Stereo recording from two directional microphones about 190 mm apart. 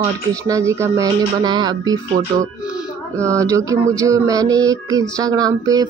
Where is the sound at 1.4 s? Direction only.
20° right (ahead or behind).